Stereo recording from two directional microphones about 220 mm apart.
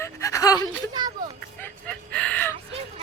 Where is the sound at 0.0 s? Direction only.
15° left (ahead or behind).